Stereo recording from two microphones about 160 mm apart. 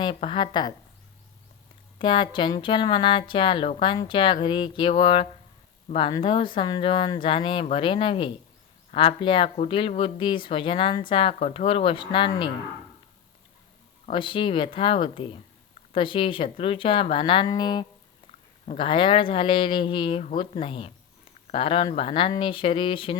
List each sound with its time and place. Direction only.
0.0 s speech: 35° left (ahead or behind)
2.0 s speech: 30° left (ahead or behind)
14.1 s speech: 30° left (ahead or behind)